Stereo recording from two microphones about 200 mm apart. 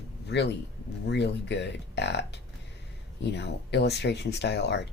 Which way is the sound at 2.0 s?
60° left (ahead or behind).